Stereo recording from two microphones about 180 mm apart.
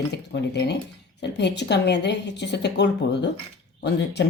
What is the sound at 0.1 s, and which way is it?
A woman's voice, 70° left (ahead or behind).